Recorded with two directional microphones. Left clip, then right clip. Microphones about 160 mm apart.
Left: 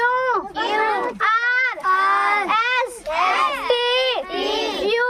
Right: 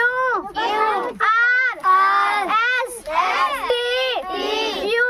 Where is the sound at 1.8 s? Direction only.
15° right (ahead or behind).